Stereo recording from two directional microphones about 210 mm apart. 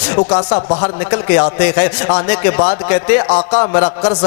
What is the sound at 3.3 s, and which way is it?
Speech, 30° left (ahead or behind).